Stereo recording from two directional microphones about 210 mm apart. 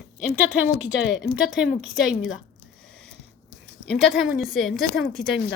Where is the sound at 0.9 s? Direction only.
55° left (ahead or behind).